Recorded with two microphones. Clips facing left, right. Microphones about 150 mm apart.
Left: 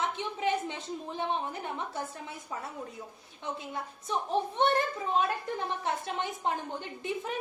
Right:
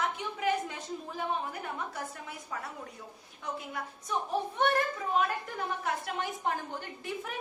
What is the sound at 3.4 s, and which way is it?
A woman's voice, 25° left (ahead or behind).